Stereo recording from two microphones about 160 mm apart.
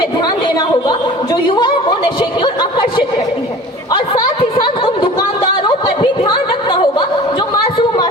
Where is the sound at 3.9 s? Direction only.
25° left (ahead or behind).